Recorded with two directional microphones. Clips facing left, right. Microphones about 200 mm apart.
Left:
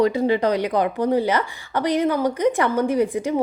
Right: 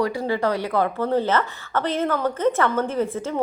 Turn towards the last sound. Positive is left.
turn(degrees=15)  # may be behind; listen again after turning